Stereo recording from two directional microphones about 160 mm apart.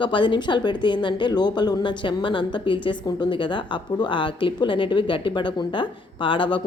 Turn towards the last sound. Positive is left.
turn(degrees=30)  # may be behind; listen again after turning